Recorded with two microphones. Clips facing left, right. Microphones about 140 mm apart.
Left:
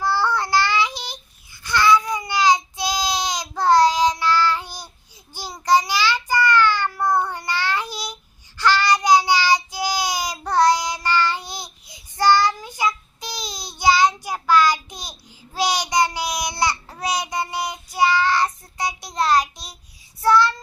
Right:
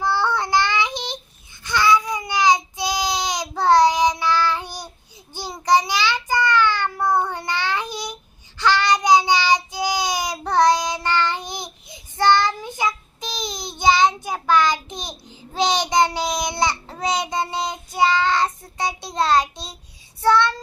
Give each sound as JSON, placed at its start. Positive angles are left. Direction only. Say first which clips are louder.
{"t": 0.0, "sound": "child singing", "louder": "even", "side_deg": -15}